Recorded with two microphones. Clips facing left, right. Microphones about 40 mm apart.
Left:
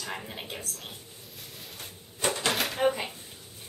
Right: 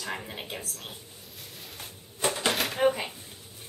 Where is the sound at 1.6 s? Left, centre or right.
Centre.